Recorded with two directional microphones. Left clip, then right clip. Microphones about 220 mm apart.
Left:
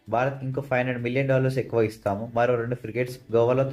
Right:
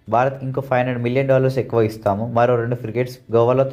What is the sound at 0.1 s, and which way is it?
Speech, 25° right (ahead or behind).